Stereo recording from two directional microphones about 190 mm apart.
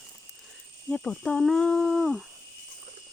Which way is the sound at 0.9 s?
5° left (ahead or behind).